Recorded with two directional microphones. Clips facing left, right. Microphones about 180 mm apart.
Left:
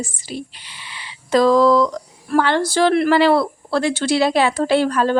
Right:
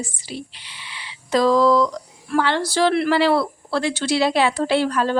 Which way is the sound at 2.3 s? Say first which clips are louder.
Left 3 dB; 50° left (ahead or behind).